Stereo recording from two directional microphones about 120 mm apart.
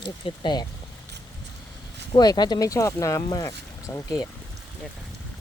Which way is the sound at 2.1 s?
35° left (ahead or behind).